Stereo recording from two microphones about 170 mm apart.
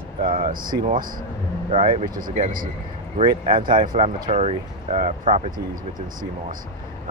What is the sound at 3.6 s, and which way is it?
Speech, 55° right (ahead or behind).